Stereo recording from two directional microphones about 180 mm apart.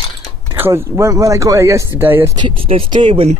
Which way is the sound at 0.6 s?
15° right (ahead or behind).